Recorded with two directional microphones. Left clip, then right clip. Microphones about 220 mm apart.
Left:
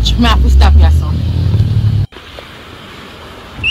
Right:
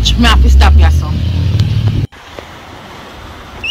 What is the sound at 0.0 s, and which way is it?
Speech, centre (ahead or behind).